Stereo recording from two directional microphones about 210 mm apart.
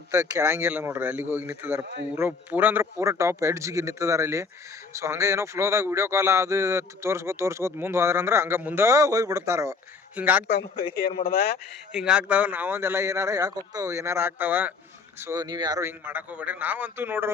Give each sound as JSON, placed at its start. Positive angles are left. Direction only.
{"t": 0.1, "sound": "speech", "side_deg": -15}
{"t": 10.4, "sound": "speech", "side_deg": 55}
{"t": 11.9, "sound": "speech", "side_deg": -5}